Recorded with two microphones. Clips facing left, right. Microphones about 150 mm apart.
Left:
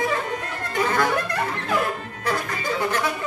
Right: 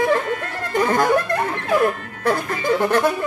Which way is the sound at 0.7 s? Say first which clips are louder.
Right 5 dB; 45° right (ahead or behind).